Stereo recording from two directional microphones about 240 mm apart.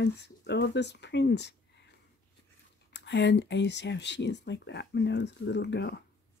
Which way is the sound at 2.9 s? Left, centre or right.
Left.